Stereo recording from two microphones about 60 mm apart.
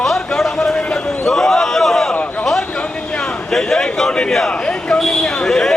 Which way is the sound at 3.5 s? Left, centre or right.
Centre.